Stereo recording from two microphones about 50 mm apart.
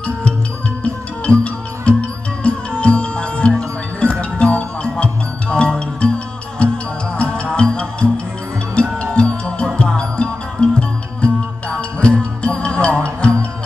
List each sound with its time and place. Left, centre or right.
0.8 s music: left